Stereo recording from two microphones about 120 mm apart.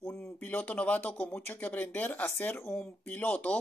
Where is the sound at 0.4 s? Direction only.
15° left (ahead or behind).